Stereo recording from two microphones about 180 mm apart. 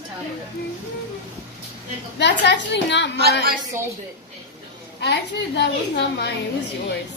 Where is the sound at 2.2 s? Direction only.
70° left (ahead or behind).